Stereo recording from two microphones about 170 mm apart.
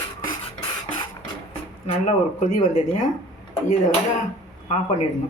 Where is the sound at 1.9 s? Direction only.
45° left (ahead or behind).